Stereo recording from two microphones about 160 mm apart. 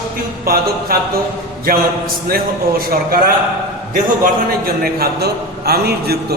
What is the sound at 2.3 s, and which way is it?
Speech, 70° right (ahead or behind).